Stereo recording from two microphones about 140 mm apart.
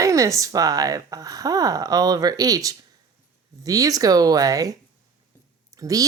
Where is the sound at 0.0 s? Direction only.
25° right (ahead or behind).